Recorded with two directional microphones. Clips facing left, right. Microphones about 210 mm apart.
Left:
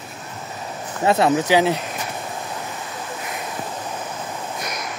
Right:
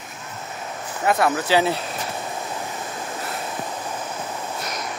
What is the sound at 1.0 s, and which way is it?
Speech, 25° left (ahead or behind).